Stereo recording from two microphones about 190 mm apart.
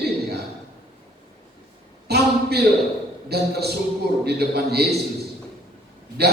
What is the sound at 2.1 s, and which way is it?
Speech, 55° right (ahead or behind).